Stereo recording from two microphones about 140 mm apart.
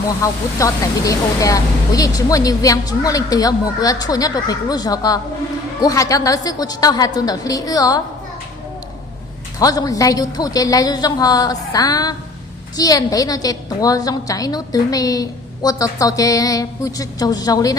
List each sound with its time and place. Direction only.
0.2 s speech: 25° left (ahead or behind)
9.6 s speech: 25° left (ahead or behind)